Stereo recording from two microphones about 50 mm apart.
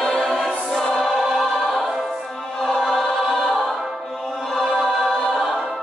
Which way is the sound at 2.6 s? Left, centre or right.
Centre.